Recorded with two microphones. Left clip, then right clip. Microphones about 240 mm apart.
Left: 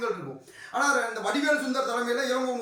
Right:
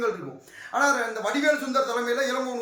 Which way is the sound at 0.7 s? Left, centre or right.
Centre.